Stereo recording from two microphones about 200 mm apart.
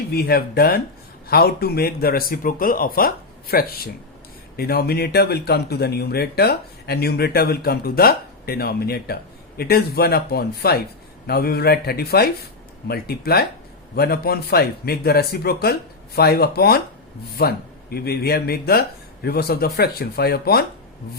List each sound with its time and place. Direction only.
0.1 s speech: 50° left (ahead or behind)